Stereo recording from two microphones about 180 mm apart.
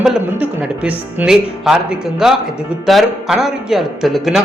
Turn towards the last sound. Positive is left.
turn(degrees=0)  # may be behind; listen again after turning